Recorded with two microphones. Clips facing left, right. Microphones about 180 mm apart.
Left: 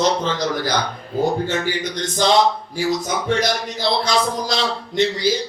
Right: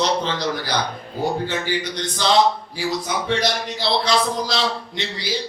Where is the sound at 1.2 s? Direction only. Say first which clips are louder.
Left 3 dB; 45° left (ahead or behind).